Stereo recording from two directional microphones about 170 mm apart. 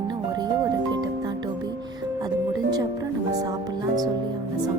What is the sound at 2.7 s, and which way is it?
Music, 20° right (ahead or behind).